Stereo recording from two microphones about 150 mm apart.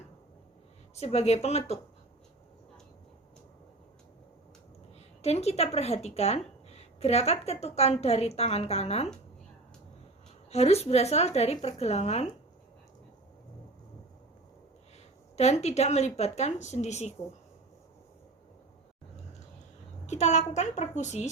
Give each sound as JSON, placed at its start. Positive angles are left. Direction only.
{"t": 0.9, "sound": "a woman's voice", "side_deg": 45}
{"t": 5.2, "sound": "a woman's voice", "side_deg": 45}
{"t": 10.5, "sound": "a woman's voice", "side_deg": 45}
{"t": 15.4, "sound": "a woman's voice", "side_deg": 45}
{"t": 20.1, "sound": "a woman's voice", "side_deg": 50}